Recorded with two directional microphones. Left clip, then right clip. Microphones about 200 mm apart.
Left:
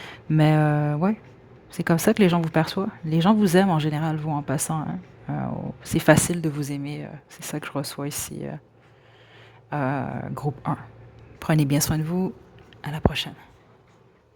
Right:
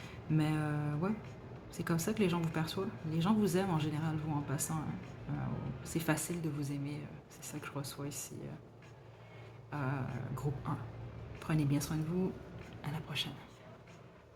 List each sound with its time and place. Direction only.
0.0 s speech: 45° left (ahead or behind)
9.6 s speech: 45° left (ahead or behind)